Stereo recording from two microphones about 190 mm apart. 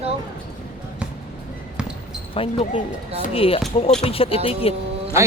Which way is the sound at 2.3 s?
30° left (ahead or behind).